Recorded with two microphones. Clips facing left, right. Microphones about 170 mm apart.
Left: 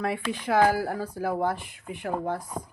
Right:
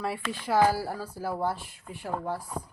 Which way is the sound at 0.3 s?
20° left (ahead or behind).